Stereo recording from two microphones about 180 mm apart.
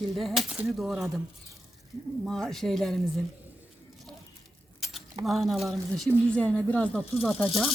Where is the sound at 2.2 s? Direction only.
5° left (ahead or behind).